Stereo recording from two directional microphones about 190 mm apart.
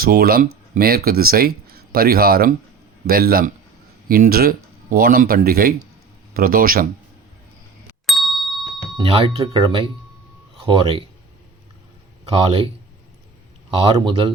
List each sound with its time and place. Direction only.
0.0 s speech: 50° right (ahead or behind)
8.0 s ding: centre (ahead or behind)
9.0 s speech: 30° right (ahead or behind)
12.3 s speech: 30° right (ahead or behind)
13.8 s speech: 25° right (ahead or behind)